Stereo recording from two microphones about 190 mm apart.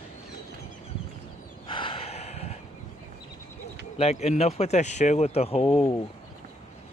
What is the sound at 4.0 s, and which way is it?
Speech, 35° left (ahead or behind).